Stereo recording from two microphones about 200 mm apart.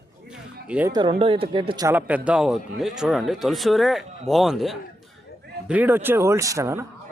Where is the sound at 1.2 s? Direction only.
25° right (ahead or behind).